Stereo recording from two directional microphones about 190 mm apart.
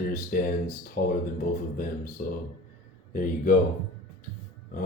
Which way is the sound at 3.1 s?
45° left (ahead or behind).